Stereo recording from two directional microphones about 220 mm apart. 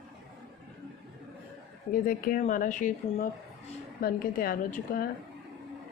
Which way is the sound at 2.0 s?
40° left (ahead or behind).